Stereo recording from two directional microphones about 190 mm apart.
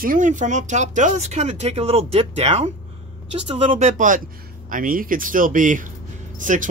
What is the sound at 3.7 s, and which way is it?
Speech, 45° right (ahead or behind).